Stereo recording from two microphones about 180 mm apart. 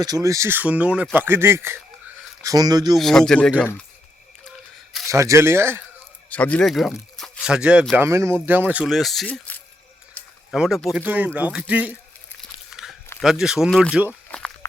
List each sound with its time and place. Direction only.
0.0 s speech: 20° right (ahead or behind)
3.0 s speech: centre (ahead or behind)
5.0 s speech: 15° right (ahead or behind)
6.3 s speech: 10° left (ahead or behind); by 11.9 s 10° right (ahead or behind)
12.7 s biting: centre (ahead or behind)
13.4 s speech: centre (ahead or behind)
14.1 s a sound: 5° left (ahead or behind)